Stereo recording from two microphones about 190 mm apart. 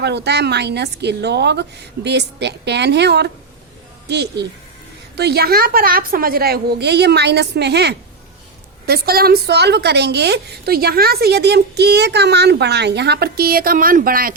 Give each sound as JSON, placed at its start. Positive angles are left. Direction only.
{"t": 0.0, "sound": "a woman's voice", "side_deg": -65}